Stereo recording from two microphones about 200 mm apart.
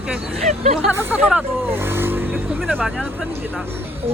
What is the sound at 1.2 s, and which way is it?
Vehicle, 10° right (ahead or behind).